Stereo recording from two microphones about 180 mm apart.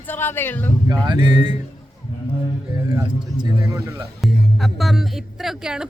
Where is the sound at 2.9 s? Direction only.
15° right (ahead or behind).